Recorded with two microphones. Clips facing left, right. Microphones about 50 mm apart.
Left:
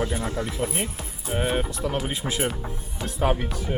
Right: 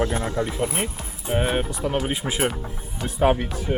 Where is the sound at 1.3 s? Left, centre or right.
Centre.